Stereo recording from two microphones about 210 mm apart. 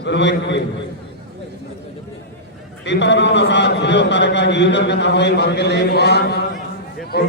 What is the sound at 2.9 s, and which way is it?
A man's voice, 55° left (ahead or behind).